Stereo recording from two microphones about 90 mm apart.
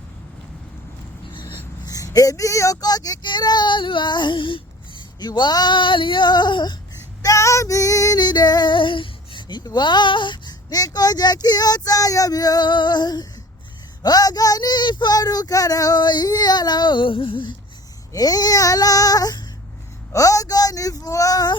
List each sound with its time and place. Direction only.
1.3 s a sound: 60° left (ahead or behind)
1.9 s speech: 40° left (ahead or behind)
3.2 s female singing: 55° left (ahead or behind)
7.2 s female singing: 35° left (ahead or behind); by 17.5 s 75° left (ahead or behind)
18.1 s female singing: 45° left (ahead or behind)
20.1 s speech: 40° left (ahead or behind)